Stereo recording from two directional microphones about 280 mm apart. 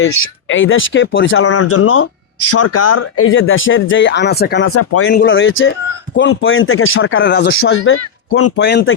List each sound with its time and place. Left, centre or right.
0.4 s speech: left
4.7 s speech: left
5.0 s speech: left
8.5 s speech: left